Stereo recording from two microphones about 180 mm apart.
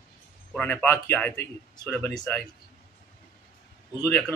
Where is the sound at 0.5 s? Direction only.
5° left (ahead or behind).